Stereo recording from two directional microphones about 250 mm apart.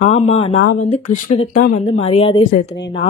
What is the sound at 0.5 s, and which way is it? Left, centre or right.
Speech, left.